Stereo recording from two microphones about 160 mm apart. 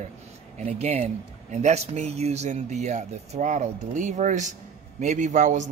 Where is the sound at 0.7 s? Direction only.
45° right (ahead or behind).